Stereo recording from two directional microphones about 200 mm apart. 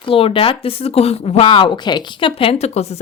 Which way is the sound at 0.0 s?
25° left (ahead or behind).